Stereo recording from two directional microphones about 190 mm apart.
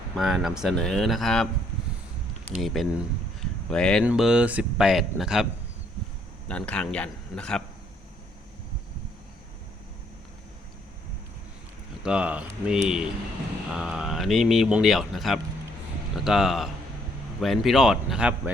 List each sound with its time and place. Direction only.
0.2 s speech: centre (ahead or behind)
2.5 s speech: centre (ahead or behind)
6.5 s speech: 5° left (ahead or behind)
12.0 s speech: 5° right (ahead or behind)